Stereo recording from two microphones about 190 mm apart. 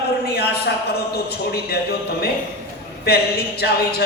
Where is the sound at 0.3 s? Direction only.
55° left (ahead or behind).